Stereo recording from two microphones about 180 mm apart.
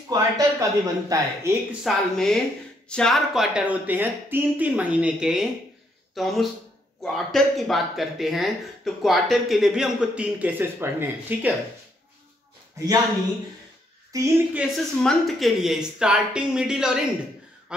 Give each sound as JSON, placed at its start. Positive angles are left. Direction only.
{"t": 0.1, "sound": "speech", "side_deg": -20}
{"t": 1.8, "sound": "speech", "side_deg": 0}
{"t": 14.1, "sound": "speech", "side_deg": -15}
{"t": 14.6, "sound": "speech", "side_deg": 0}
{"t": 17.7, "sound": "a sound", "side_deg": -5}